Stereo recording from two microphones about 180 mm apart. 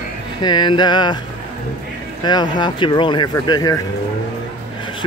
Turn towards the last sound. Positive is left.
turn(degrees=20)  # may be behind; listen again after turning